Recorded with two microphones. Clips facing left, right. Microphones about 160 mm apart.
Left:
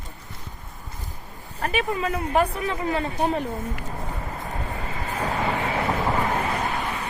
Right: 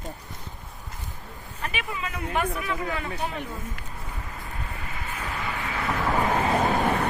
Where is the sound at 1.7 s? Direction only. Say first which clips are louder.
Left 10 dB; 40° left (ahead or behind).